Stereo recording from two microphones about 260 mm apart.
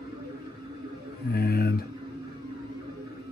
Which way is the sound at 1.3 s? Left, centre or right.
Left.